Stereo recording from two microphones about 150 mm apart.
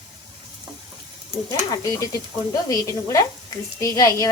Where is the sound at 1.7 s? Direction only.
25° left (ahead or behind).